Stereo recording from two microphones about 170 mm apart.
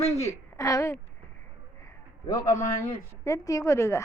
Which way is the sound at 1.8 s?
20° left (ahead or behind).